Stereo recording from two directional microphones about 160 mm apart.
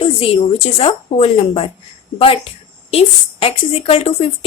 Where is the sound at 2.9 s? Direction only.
40° left (ahead or behind).